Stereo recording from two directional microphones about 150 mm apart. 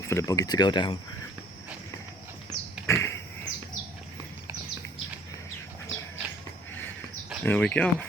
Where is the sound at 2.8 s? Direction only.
20° left (ahead or behind).